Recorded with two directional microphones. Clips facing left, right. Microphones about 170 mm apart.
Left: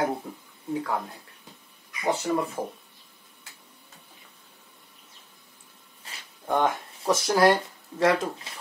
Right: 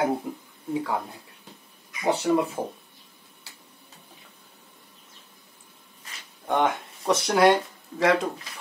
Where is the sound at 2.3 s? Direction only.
5° right (ahead or behind).